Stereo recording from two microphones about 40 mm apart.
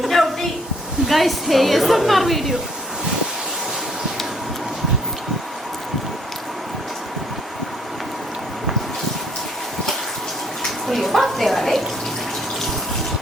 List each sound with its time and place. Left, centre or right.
0.0 s a sound: centre
1.0 s a woman's voice: centre
10.6 s bathtub: centre